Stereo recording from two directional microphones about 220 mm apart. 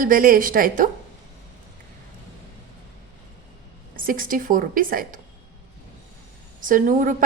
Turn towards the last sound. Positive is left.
turn(degrees=-35)  # may be behind; listen again after turning